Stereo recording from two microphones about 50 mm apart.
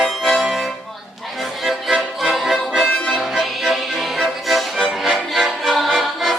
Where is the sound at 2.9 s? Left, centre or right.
Left.